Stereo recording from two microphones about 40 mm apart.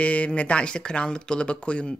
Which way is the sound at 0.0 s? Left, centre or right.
Left.